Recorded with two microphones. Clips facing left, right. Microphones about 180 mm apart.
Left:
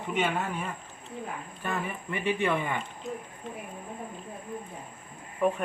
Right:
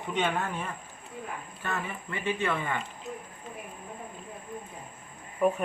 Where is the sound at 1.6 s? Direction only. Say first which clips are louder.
Left 2 dB; 15° left (ahead or behind).